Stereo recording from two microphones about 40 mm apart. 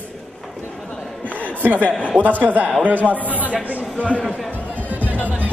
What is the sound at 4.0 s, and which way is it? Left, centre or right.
Speech, left.